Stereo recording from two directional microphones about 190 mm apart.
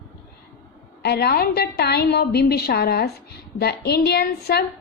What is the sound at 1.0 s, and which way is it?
A woman's voice, 60° left (ahead or behind).